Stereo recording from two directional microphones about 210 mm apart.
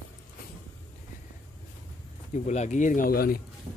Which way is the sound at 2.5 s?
35° left (ahead or behind).